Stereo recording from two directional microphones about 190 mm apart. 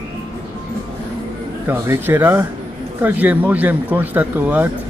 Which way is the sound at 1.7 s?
10° right (ahead or behind).